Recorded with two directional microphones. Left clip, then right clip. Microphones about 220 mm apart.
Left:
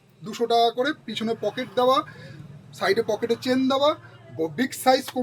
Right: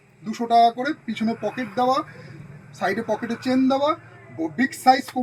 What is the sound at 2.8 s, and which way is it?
Speech, 25° left (ahead or behind).